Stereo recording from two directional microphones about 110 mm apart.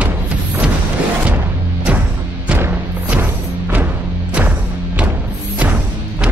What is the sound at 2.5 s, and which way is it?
Music, 15° right (ahead or behind).